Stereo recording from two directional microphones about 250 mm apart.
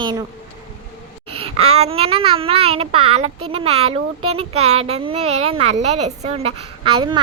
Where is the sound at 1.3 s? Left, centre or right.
Right.